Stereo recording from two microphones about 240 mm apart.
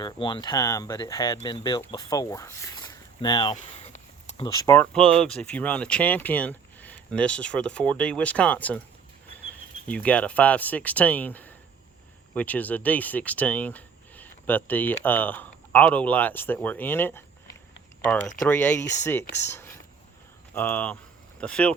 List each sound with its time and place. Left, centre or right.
0.0 s speech: centre
3.5 s a sound: left
4.4 s speech: centre
9.8 s speech: centre
18.3 s speech: centre
19.4 s a sound: centre
20.5 s speech: centre